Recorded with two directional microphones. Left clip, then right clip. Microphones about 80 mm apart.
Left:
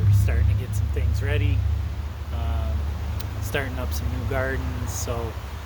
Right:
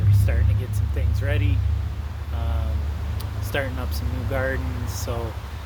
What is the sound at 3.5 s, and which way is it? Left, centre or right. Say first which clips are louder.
Speech: right 1 dB; left.